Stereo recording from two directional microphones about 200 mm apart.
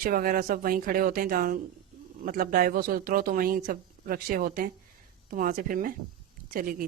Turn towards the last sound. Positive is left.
turn(degrees=-45)  # may be behind; listen again after turning